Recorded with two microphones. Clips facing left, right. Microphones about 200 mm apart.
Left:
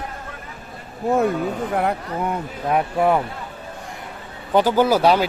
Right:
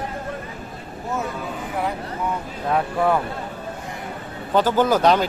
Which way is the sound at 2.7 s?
15° left (ahead or behind).